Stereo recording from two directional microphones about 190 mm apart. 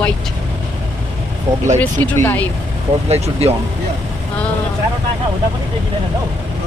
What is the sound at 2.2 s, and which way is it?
Speech, 10° left (ahead or behind).